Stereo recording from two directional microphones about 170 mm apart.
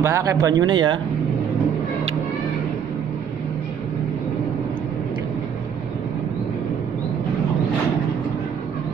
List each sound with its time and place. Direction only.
0.0 s speech: 15° right (ahead or behind)